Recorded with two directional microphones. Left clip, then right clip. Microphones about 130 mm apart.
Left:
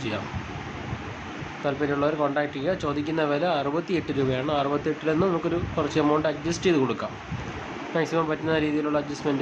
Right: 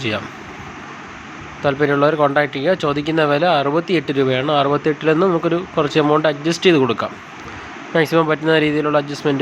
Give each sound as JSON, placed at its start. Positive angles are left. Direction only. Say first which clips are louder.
{"t": 1.6, "sound": "speech", "louder": "right 10 dB", "side_deg": -45}